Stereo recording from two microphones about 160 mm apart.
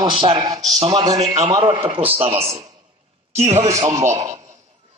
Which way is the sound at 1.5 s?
35° right (ahead or behind).